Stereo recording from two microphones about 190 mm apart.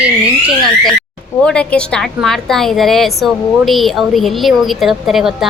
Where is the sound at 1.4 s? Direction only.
5° left (ahead or behind).